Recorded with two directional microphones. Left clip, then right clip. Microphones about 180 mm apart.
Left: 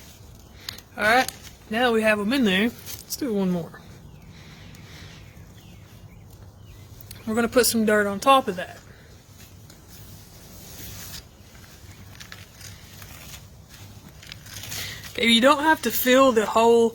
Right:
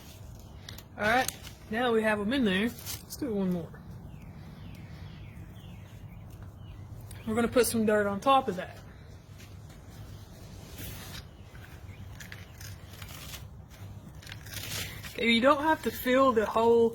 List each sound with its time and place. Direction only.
0.9 s speech: 50° left (ahead or behind)
7.1 s speech: 35° left (ahead or behind); by 8.7 s 55° left (ahead or behind)
15.1 s speech: 60° left (ahead or behind)